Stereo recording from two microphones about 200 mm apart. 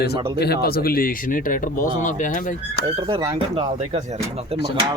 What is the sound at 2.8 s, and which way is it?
Speech, 25° right (ahead or behind).